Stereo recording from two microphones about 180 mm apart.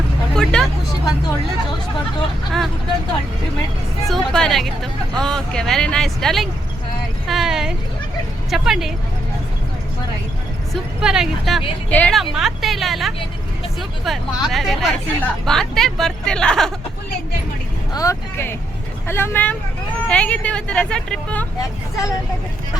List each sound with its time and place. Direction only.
0.3 s a sound: 5° left (ahead or behind)
4.1 s speech: 5° left (ahead or behind)
11.0 s speech: 5° right (ahead or behind)
17.9 s speech: 15° left (ahead or behind)
21.6 s speech: 20° left (ahead or behind)